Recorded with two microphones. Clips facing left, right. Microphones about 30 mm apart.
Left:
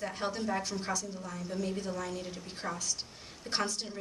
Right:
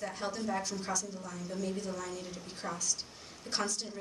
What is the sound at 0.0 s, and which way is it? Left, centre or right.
A woman's voice, left.